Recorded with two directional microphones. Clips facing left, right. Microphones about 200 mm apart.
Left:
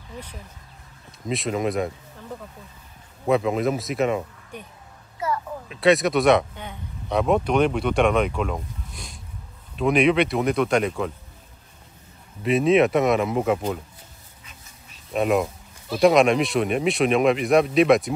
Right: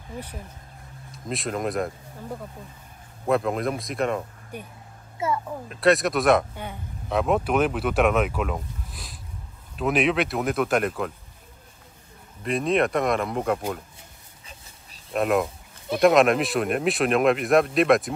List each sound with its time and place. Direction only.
1.1 s speech: centre (ahead or behind)
3.3 s speech: centre (ahead or behind)
5.2 s a sound: 25° right (ahead or behind)
5.7 s speech: centre (ahead or behind)
12.4 s speech: centre (ahead or behind)
14.4 s a sound: 30° right (ahead or behind)
15.1 s speech: centre (ahead or behind)